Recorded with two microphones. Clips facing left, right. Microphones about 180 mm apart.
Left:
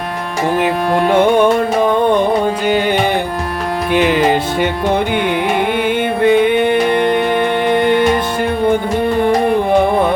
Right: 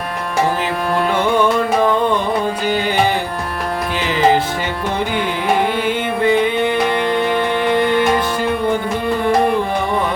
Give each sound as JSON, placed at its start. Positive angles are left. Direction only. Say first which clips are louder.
{"t": 3.9, "sound": "music", "louder": "left 3 dB", "side_deg": 60}
{"t": 6.2, "sound": "music", "louder": "left 4 dB", "side_deg": 55}